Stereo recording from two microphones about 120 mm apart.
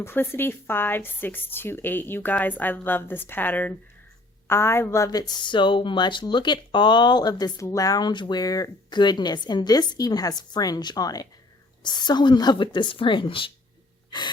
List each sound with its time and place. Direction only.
0.0 s a woman's voice: 20° left (ahead or behind); by 13.5 s 45° left (ahead or behind)